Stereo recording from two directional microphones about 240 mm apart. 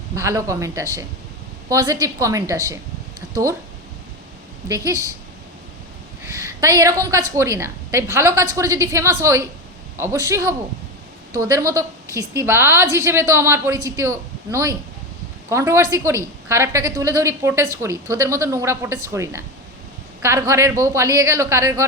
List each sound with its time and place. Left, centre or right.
0.2 s a woman's voice: centre
3.2 s a sound: centre
4.9 s a woman's voice: centre
6.2 s a woman's voice: centre